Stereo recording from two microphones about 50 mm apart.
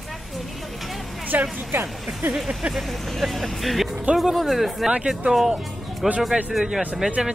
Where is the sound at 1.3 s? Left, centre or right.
Right.